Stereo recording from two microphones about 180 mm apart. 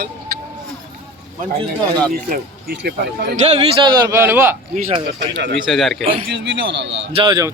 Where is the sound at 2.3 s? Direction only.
65° right (ahead or behind).